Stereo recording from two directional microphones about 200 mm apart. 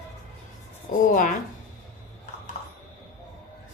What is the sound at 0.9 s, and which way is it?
Speech, 40° left (ahead or behind).